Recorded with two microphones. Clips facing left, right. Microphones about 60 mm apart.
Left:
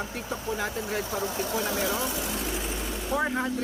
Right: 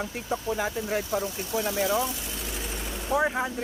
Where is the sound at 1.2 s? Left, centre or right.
Left.